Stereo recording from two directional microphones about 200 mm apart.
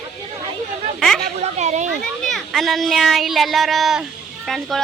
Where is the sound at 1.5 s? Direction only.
35° right (ahead or behind).